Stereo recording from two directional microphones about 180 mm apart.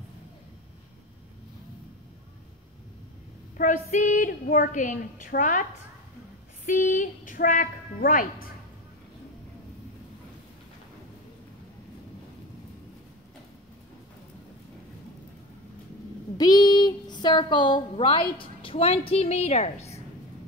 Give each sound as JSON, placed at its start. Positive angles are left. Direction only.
{"t": 3.5, "sound": "a woman's voice", "side_deg": 45}
{"t": 16.3, "sound": "a woman's voice", "side_deg": 20}